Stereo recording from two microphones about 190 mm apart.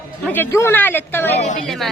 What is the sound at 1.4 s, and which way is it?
Speech, 40° left (ahead or behind).